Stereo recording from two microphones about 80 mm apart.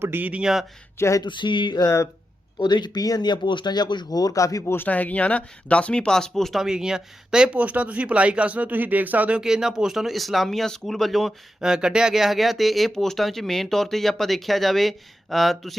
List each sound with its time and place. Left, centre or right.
0.0 s speech: right
0.9 s a sound: left
1.2 s a sound: left
2.6 s speech: left
4.7 s speech: left; by 9.4 s centre
9.4 s speech: centre